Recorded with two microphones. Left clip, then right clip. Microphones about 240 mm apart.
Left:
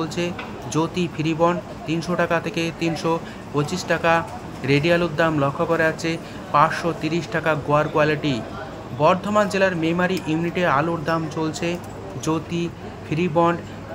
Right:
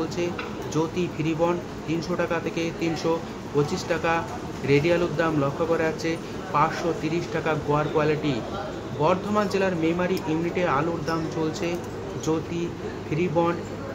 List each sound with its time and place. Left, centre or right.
0.7 s speech: left
12.3 s speech: centre